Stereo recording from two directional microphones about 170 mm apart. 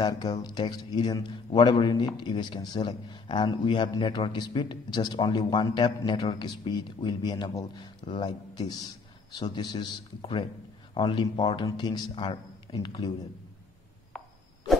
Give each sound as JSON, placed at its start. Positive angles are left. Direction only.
{"t": 0.0, "sound": "a man's voice", "side_deg": 25}